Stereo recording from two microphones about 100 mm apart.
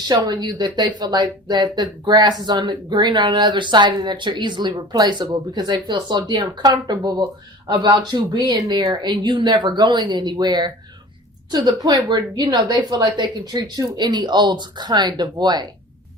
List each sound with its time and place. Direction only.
0.0 s speech: 45° right (ahead or behind)